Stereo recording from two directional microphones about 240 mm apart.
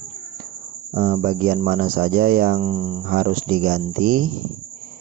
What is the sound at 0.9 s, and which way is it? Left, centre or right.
Speech, right.